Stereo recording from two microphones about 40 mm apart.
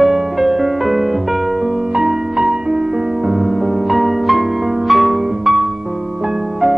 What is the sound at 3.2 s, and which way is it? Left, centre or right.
Music, centre.